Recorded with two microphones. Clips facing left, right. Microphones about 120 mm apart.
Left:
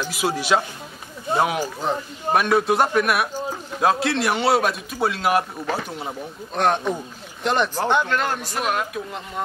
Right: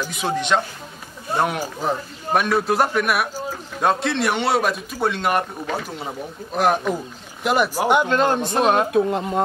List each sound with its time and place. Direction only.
0.1 s a man's voice: 5° left (ahead or behind)
1.3 s a sound: 25° left (ahead or behind)
1.8 s a man's voice: centre (ahead or behind); by 9.4 s 30° right (ahead or behind)